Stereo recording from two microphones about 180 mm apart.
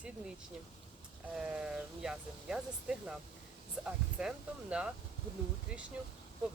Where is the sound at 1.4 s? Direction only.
5° right (ahead or behind).